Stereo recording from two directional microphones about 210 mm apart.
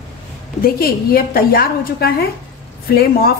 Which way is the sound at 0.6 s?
45° left (ahead or behind).